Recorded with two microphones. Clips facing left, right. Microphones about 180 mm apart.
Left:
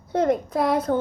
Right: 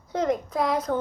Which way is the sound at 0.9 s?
25° left (ahead or behind).